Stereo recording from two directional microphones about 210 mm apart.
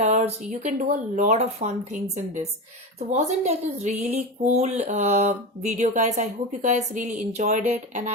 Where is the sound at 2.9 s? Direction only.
35° right (ahead or behind).